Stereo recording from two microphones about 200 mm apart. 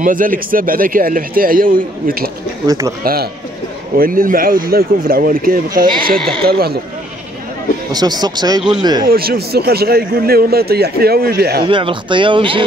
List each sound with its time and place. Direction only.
0.0 s a man's voice: 45° right (ahead or behind)
2.6 s speech: 20° right (ahead or behind)
3.0 s a man's voice: 45° right (ahead or behind)
6.1 s speech: 5° left (ahead or behind)
6.4 s a man's voice: 50° right (ahead or behind)
7.9 s speech: 20° right (ahead or behind)
9.1 s a man's voice: 50° right (ahead or behind)
11.6 s speech: 25° right (ahead or behind)